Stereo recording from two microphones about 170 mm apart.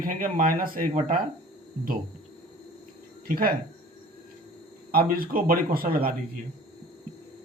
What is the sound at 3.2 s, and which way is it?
Speech, 60° right (ahead or behind).